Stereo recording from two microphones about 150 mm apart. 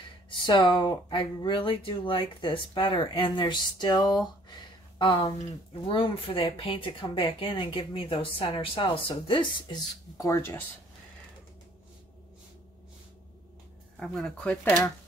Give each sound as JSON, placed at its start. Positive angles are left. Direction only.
{"t": 0.5, "sound": "speech", "side_deg": 30}
{"t": 10.1, "sound": "speech", "side_deg": 20}
{"t": 13.9, "sound": "speech", "side_deg": 5}